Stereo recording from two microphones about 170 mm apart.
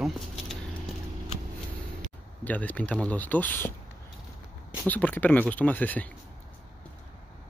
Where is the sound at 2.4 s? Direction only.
10° left (ahead or behind).